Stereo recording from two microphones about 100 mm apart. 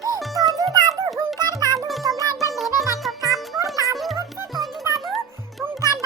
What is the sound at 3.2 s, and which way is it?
Music, 35° right (ahead or behind).